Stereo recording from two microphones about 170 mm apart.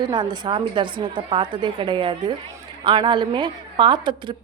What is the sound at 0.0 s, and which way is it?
A woman's voice, 25° right (ahead or behind).